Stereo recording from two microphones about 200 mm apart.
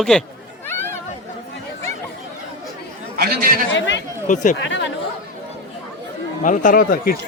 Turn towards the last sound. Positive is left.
turn(degrees=45)  # may be behind; listen again after turning